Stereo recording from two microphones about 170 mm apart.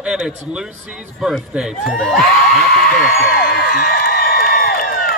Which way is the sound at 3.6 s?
65° left (ahead or behind).